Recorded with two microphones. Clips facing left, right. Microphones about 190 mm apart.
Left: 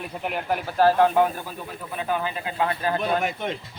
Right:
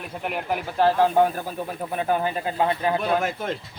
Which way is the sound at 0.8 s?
20° right (ahead or behind).